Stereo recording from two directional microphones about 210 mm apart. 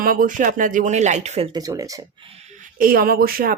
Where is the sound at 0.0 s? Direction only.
40° right (ahead or behind).